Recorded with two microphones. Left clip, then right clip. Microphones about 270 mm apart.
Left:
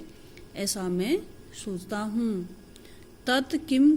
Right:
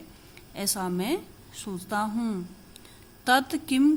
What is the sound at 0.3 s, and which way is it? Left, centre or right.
A woman's voice, right.